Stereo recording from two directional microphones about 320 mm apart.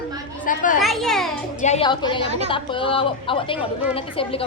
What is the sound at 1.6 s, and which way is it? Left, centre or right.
A woman's voice, centre.